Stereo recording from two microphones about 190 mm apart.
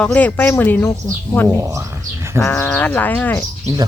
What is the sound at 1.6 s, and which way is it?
Speech, 15° right (ahead or behind).